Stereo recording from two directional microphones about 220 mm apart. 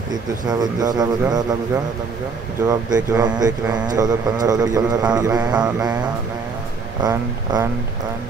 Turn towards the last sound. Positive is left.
turn(degrees=-15)  # may be behind; listen again after turning